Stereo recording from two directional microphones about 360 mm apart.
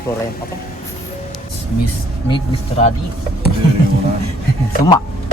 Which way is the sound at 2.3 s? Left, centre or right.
Centre.